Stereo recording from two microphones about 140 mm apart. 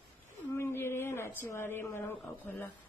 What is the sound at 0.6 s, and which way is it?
Speech, 15° left (ahead or behind).